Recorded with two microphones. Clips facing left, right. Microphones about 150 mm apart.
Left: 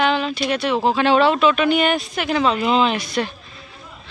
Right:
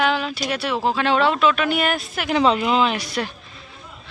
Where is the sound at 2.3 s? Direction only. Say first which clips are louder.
Right 2 dB; 20° right (ahead or behind).